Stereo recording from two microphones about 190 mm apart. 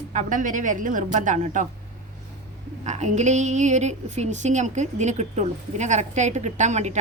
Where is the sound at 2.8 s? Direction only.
35° right (ahead or behind).